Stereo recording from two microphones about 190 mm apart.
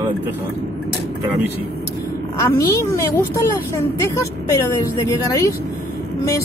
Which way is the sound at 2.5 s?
15° left (ahead or behind).